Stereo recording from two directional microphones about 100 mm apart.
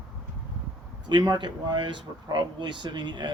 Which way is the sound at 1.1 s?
50° right (ahead or behind).